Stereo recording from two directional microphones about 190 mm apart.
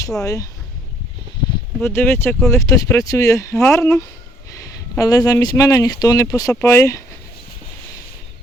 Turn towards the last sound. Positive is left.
turn(degrees=15)  # may be behind; listen again after turning